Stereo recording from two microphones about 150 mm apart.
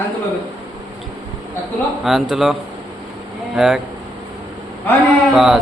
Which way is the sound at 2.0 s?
Centre (ahead or behind).